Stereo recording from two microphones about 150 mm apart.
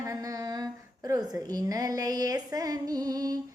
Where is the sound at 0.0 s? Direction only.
25° right (ahead or behind).